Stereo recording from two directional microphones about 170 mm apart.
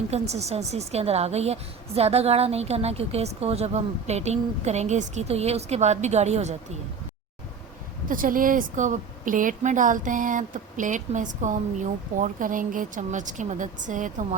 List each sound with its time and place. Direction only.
0.1 s a woman's voice: 40° right (ahead or behind)
8.0 s a woman's voice: 55° right (ahead or behind)